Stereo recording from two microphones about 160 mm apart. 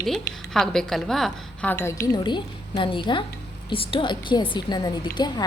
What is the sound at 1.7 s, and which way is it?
A woman's voice, 20° left (ahead or behind).